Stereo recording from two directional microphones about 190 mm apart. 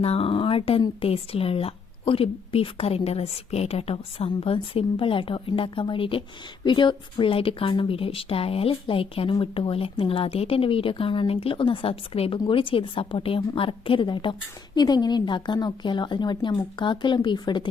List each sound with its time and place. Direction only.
0.0 s speech: 30° left (ahead or behind)